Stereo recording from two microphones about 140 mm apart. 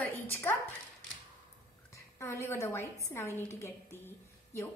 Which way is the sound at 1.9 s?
20° left (ahead or behind).